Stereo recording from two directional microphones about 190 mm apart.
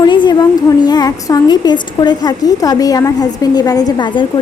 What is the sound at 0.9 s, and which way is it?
A woman's voice, 20° left (ahead or behind).